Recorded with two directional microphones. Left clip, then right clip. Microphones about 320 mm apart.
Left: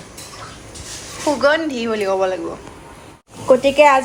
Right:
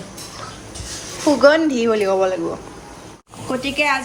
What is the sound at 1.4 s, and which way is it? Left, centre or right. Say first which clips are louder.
Speech: right 4 dB; centre.